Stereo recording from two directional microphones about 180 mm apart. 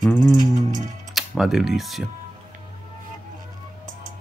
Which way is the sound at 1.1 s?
Centre (ahead or behind).